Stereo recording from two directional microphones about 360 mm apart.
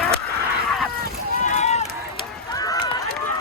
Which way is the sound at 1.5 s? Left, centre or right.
Centre.